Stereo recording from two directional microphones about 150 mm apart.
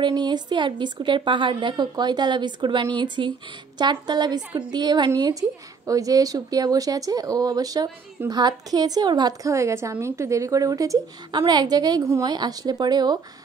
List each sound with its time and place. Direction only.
0.0 s a woman's voice: 30° right (ahead or behind)